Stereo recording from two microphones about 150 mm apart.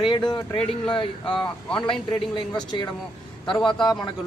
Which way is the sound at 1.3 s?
5° left (ahead or behind).